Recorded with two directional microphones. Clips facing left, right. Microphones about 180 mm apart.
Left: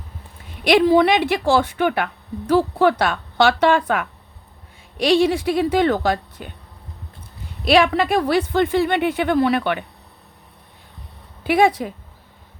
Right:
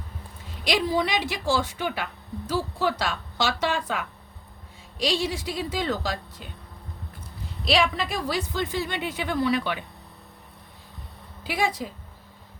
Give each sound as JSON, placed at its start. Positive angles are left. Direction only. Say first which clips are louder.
{"t": 0.6, "sound": "a woman's voice", "louder": "left 10 dB", "side_deg": 60}
{"t": 7.6, "sound": "a woman's voice", "louder": "left 8 dB", "side_deg": 60}
{"t": 11.4, "sound": "a woman's voice", "louder": "left 10 dB", "side_deg": 60}